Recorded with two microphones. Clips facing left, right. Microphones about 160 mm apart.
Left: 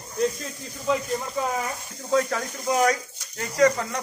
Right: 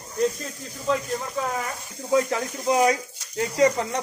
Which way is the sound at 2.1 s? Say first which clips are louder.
Right 1 dB; 20° right (ahead or behind).